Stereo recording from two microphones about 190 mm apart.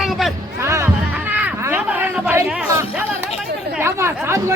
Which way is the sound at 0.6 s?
15° right (ahead or behind).